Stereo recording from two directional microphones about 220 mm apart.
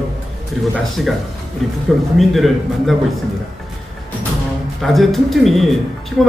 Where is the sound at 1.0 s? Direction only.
Centre (ahead or behind).